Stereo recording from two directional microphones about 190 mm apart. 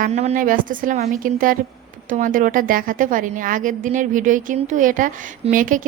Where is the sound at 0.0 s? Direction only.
35° right (ahead or behind).